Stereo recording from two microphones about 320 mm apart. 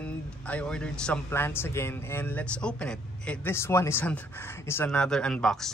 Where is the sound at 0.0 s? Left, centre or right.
Centre.